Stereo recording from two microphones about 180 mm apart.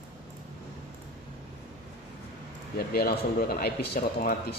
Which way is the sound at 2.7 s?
60° left (ahead or behind).